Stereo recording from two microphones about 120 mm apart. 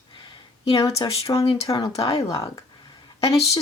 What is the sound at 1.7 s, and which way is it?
Speech, 45° left (ahead or behind).